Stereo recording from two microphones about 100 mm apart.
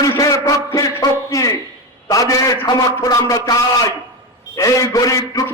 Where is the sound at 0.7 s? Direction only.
35° left (ahead or behind).